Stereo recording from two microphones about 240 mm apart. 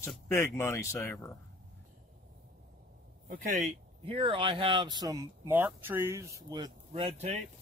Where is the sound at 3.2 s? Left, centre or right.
Right.